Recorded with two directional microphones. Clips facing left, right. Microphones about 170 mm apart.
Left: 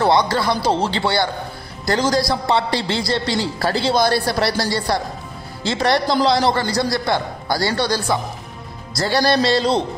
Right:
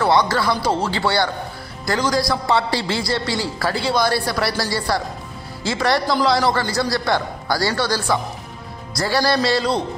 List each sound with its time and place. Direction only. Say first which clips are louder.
0.0 s a man's voice: left 1 dB; 20° left (ahead or behind)